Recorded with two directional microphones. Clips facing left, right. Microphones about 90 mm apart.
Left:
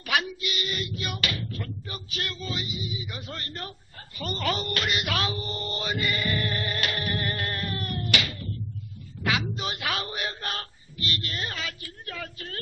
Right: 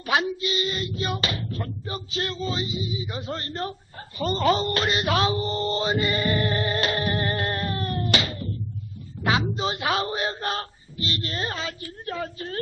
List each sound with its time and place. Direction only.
0.0 s speech: 30° right (ahead or behind)
4.2 s mantra: 30° right (ahead or behind)
9.2 s a sound: 30° right (ahead or behind)